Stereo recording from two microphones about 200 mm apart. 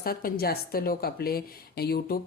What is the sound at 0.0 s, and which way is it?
Speech, 45° left (ahead or behind).